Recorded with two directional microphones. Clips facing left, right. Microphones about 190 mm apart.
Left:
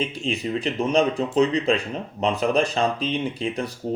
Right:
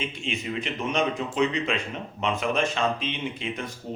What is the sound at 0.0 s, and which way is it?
Speech, 35° left (ahead or behind).